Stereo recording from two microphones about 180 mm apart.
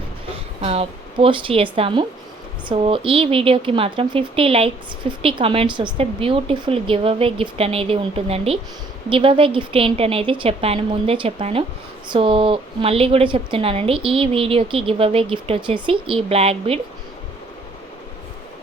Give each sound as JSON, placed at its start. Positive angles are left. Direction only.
{"t": 0.6, "sound": "speech", "side_deg": -35}